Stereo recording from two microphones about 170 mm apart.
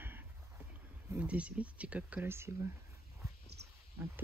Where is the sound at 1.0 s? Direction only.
5° right (ahead or behind).